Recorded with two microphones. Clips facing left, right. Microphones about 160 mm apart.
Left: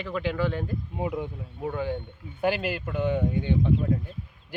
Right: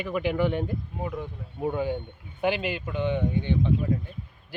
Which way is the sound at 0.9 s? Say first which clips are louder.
Left 6 dB; 15° left (ahead or behind).